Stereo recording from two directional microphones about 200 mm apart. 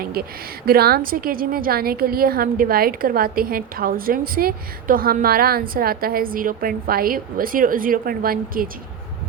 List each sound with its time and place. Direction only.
0.0 s a woman's voice: 50° right (ahead or behind)